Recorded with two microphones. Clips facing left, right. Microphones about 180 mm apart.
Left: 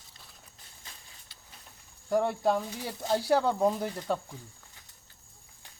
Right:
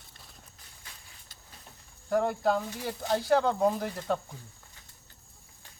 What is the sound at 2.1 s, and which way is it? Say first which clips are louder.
Speech: even; centre (ahead or behind).